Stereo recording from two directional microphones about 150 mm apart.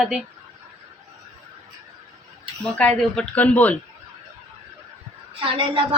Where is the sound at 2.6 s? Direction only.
5° left (ahead or behind).